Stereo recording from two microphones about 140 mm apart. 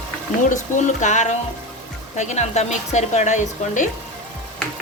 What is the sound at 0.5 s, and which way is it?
A woman's voice, 60° left (ahead or behind).